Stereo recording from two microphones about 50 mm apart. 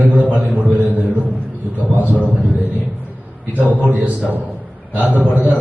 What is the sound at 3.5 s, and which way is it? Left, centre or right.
A man's voice, right.